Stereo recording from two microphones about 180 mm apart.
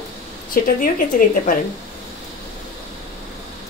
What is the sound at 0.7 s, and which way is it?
Speech, 50° left (ahead or behind).